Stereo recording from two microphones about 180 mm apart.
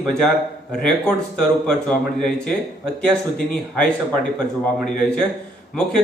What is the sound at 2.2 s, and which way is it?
Speech, 5° left (ahead or behind).